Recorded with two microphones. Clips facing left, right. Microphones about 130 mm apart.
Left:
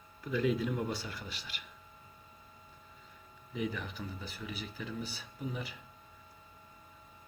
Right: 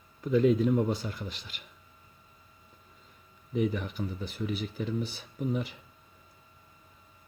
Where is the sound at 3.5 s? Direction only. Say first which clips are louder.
Right 8 dB; 40° right (ahead or behind).